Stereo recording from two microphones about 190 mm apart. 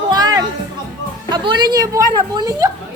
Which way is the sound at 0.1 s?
20° right (ahead or behind).